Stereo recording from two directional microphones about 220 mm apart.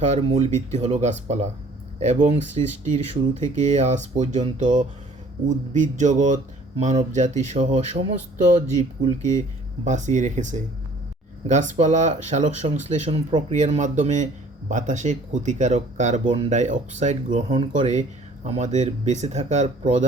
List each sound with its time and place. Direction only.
0.0 s speech: 30° right (ahead or behind)
11.7 s speech: 35° right (ahead or behind)